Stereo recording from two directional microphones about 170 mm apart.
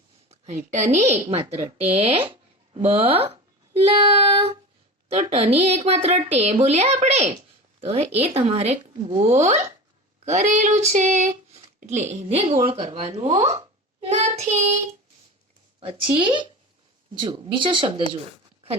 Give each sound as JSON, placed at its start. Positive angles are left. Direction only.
{"t": 0.3, "sound": "a woman's voice", "side_deg": -45}
{"t": 5.0, "sound": "a woman's voice", "side_deg": -40}
{"t": 15.8, "sound": "a woman's voice", "side_deg": -35}
{"t": 18.1, "sound": "a sound", "side_deg": -35}